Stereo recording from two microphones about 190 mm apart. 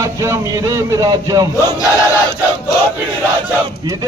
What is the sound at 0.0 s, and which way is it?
A man's voice, 15° right (ahead or behind).